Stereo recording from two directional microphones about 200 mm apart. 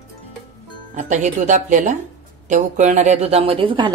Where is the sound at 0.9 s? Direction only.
35° right (ahead or behind).